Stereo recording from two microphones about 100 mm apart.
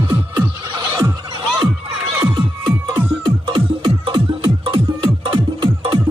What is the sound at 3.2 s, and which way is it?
Music, 60° right (ahead or behind).